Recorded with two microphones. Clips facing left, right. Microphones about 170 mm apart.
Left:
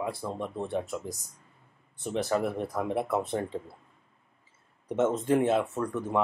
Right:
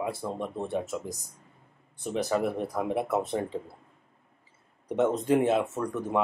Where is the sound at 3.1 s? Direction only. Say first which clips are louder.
Right 2 dB; 15° right (ahead or behind).